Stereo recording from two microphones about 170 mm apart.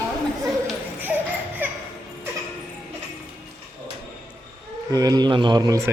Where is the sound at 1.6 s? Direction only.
10° right (ahead or behind).